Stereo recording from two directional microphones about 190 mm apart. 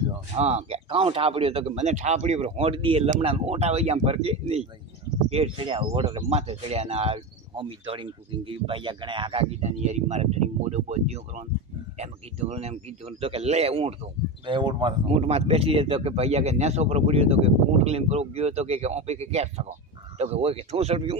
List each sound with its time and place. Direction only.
0.3 s speech: 35° right (ahead or behind)